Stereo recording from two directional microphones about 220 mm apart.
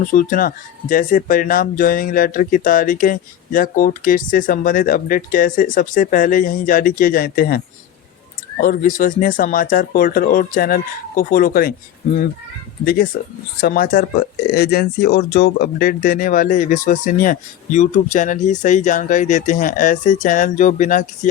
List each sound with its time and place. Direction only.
0.0 s speech: 40° left (ahead or behind)
8.6 s speech: 40° left (ahead or behind)
12.8 s speech: 45° left (ahead or behind)